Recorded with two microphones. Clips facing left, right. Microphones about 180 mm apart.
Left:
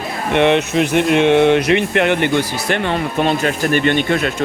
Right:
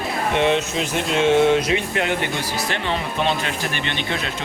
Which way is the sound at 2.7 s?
55° left (ahead or behind).